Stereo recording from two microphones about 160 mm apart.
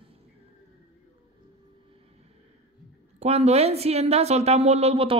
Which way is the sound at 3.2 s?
40° right (ahead or behind).